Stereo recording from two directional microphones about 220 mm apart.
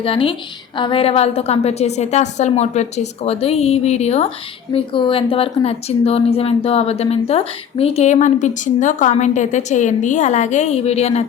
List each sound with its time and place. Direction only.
0.0 s speech: 25° left (ahead or behind)